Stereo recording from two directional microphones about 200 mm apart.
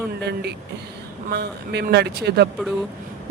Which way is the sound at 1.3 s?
55° right (ahead or behind).